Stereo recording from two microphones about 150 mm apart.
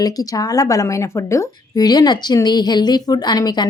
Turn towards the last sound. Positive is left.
turn(degrees=30)  # may be behind; listen again after turning